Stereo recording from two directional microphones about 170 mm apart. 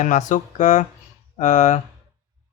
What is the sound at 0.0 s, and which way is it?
Speech, 45° left (ahead or behind).